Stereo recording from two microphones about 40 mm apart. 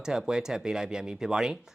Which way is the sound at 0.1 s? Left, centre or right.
Centre.